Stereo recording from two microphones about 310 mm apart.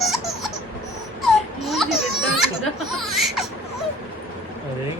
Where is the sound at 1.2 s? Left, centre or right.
Centre.